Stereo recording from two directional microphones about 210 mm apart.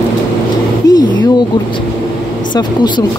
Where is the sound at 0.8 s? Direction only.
20° left (ahead or behind).